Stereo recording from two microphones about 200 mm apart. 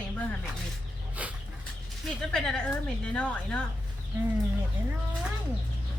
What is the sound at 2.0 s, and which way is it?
A woman's voice, centre (ahead or behind).